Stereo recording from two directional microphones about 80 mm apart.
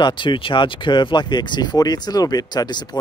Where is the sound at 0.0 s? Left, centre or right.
Left.